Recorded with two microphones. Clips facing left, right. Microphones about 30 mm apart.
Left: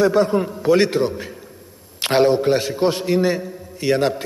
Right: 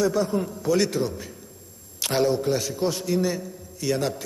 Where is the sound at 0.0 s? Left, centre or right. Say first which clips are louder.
Left 7 dB; left.